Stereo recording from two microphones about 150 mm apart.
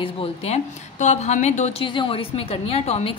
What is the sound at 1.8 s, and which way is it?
A woman's voice, 35° left (ahead or behind).